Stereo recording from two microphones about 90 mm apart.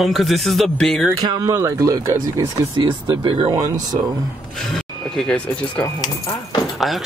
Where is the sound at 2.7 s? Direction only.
65° right (ahead or behind); by 3.5 s 80° right.